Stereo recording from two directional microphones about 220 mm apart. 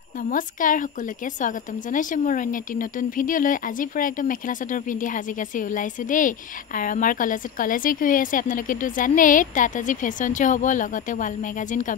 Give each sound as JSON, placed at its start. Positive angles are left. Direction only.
{"t": 0.2, "sound": "a woman's voice", "side_deg": 35}